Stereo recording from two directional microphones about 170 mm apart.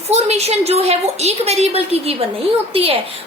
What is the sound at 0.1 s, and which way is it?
A woman's voice, 40° right (ahead or behind).